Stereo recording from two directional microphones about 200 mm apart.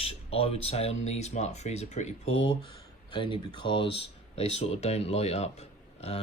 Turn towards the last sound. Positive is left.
turn(degrees=30)  # may be behind; listen again after turning